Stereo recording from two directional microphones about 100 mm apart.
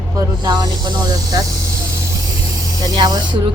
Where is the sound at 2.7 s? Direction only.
45° right (ahead or behind).